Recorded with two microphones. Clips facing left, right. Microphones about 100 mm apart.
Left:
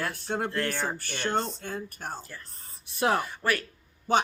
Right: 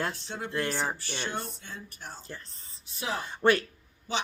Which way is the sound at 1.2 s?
50° left (ahead or behind).